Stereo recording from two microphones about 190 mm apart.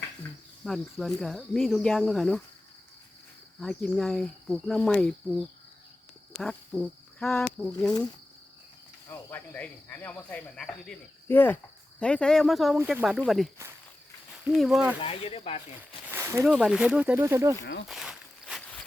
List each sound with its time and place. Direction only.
0.6 s speech: centre (ahead or behind)
3.6 s speech: 5° left (ahead or behind)
9.0 s cricket: 10° left (ahead or behind)
11.9 s speech: 5° left (ahead or behind)
14.5 s speech: centre (ahead or behind)
15.0 s speech: 30° left (ahead or behind)
16.0 s a sound: 15° right (ahead or behind)
16.5 s speech: centre (ahead or behind)
17.8 s walk: centre (ahead or behind)